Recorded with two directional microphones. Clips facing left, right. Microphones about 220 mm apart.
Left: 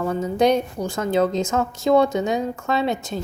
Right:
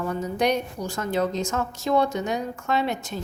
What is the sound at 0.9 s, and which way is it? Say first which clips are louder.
Speech: left 5 dB; 90° left.